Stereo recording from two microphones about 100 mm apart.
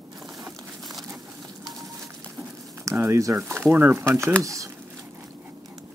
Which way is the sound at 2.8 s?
25° right (ahead or behind).